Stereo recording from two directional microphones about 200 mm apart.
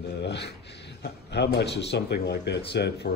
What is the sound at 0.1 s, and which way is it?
Speech, 55° left (ahead or behind).